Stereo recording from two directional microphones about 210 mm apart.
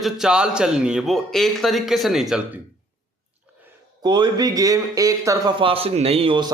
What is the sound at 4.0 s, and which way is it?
Speech, 20° right (ahead or behind).